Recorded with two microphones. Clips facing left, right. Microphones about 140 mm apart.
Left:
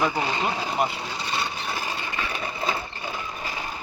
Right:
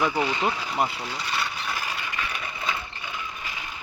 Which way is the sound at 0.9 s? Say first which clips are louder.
Left 1 dB; 25° left (ahead or behind).